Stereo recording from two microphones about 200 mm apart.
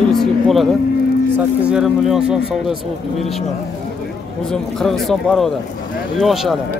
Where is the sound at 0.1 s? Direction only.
Centre (ahead or behind).